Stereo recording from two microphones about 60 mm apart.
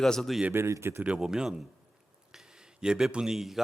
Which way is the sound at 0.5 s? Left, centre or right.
Right.